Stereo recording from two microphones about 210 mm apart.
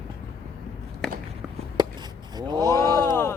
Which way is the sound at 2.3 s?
20° right (ahead or behind).